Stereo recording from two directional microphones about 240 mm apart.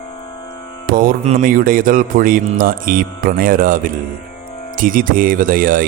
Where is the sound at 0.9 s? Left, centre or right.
Right.